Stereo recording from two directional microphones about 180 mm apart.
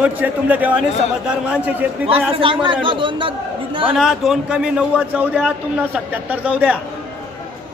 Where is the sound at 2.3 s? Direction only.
30° right (ahead or behind).